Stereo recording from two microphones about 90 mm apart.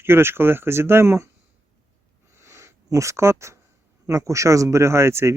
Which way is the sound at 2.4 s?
30° right (ahead or behind).